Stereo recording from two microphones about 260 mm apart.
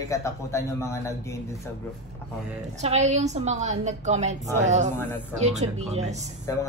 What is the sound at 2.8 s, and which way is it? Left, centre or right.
A woman's voice, right.